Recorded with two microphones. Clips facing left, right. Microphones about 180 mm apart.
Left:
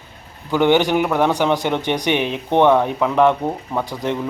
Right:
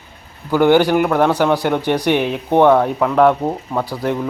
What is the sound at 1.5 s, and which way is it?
Speech, 5° right (ahead or behind).